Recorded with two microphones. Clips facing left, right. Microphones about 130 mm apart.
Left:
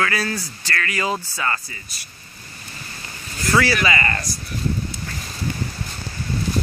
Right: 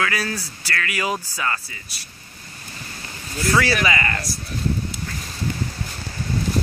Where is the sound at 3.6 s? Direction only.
15° right (ahead or behind).